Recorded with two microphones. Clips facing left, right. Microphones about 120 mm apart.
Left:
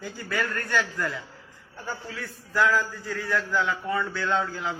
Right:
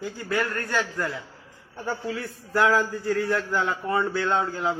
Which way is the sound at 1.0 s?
25° right (ahead or behind).